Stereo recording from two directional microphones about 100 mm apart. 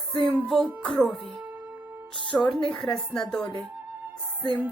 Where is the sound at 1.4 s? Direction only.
15° right (ahead or behind).